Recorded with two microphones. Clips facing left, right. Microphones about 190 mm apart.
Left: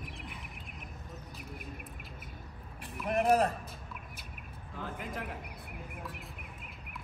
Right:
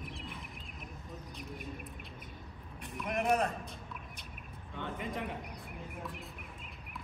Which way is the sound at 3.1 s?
35° left (ahead or behind).